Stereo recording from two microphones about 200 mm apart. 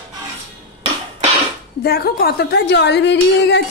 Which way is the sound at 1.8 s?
50° left (ahead or behind).